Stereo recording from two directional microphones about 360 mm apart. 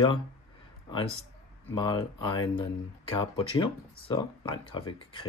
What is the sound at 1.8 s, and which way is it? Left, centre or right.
Speech, centre.